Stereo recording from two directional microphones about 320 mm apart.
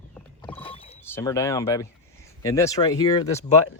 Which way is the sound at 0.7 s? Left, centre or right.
Centre.